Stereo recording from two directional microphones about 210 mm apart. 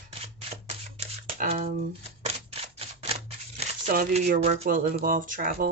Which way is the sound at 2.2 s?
30° right (ahead or behind).